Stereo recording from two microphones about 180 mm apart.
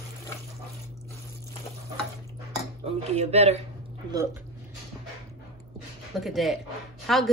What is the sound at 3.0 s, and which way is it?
Speech, 35° right (ahead or behind).